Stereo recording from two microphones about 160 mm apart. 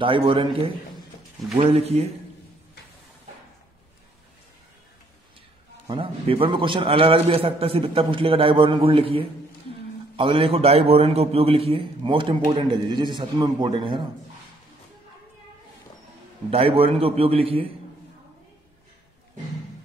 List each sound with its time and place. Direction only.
0.0 s a man's voice: 30° right (ahead or behind)
5.9 s a man's voice: 35° right (ahead or behind)
16.4 s a man's voice: 35° right (ahead or behind)